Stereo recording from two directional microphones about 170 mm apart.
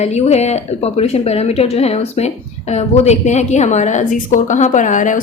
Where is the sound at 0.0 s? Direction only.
40° left (ahead or behind).